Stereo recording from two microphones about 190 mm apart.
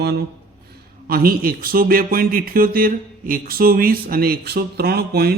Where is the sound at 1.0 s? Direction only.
50° right (ahead or behind).